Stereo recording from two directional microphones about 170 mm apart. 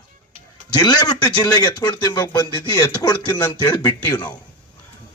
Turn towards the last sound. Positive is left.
turn(degrees=25)  # may be behind; listen again after turning